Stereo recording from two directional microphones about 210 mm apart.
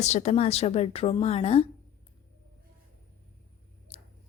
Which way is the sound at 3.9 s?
30° left (ahead or behind).